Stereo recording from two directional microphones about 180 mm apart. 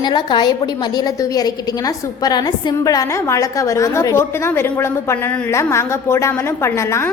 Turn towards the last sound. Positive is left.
turn(degrees=15)  # may be behind; listen again after turning